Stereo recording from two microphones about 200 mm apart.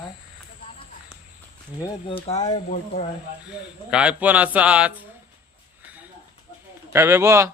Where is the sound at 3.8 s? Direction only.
5° right (ahead or behind).